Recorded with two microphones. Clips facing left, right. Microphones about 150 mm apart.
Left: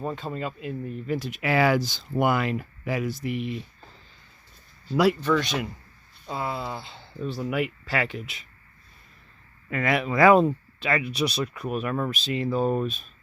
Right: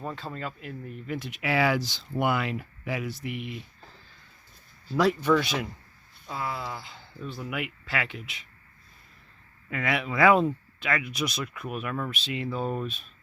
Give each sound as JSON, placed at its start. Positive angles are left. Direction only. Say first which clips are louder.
{"t": 0.0, "sound": "speech", "louder": "left 4 dB", "side_deg": 20}
{"t": 1.0, "sound": "speech", "louder": "left 3 dB", "side_deg": 35}
{"t": 5.2, "sound": "speech", "louder": "even", "side_deg": -5}
{"t": 6.2, "sound": "speech", "louder": "left 3 dB", "side_deg": 25}
{"t": 9.6, "sound": "speech", "louder": "left 4 dB", "side_deg": 45}